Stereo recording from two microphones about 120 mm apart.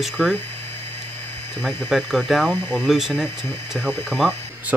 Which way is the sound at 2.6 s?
20° left (ahead or behind).